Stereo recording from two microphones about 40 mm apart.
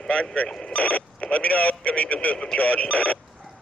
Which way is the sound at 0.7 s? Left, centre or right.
Left.